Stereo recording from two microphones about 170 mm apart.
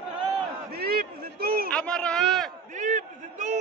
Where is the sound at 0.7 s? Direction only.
65° right (ahead or behind).